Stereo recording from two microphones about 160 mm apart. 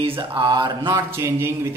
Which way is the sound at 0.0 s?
30° right (ahead or behind).